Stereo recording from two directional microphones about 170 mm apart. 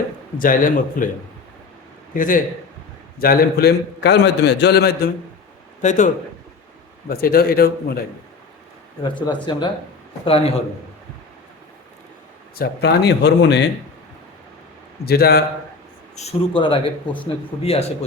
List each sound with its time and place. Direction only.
0.3 s a man's voice: 55° left (ahead or behind)
2.1 s a man's voice: 50° left (ahead or behind)
3.2 s a man's voice: 65° left (ahead or behind)
5.8 s a man's voice: 45° left (ahead or behind)
7.1 s a man's voice: 60° left (ahead or behind)
9.5 s speech: 25° left (ahead or behind)
12.5 s speech: 75° left (ahead or behind)
15.0 s a man's voice: 65° left (ahead or behind)
16.1 s speech: 35° left (ahead or behind)